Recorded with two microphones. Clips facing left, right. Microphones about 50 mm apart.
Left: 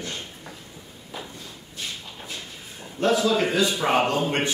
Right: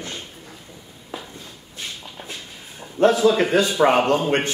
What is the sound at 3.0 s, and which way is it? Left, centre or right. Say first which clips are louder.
A man's voice: right 5 dB; right.